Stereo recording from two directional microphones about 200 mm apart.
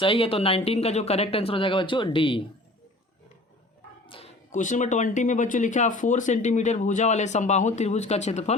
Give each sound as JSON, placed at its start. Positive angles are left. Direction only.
{"t": 0.0, "sound": "speech", "side_deg": 25}
{"t": 4.0, "sound": "a sound", "side_deg": 25}
{"t": 4.5, "sound": "speech", "side_deg": 40}